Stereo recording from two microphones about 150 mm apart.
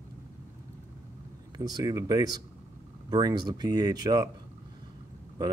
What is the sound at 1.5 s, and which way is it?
Speech, 25° right (ahead or behind).